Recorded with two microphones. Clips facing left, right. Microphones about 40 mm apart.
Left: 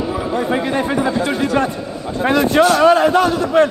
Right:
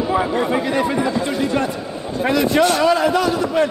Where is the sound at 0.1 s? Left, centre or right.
Right.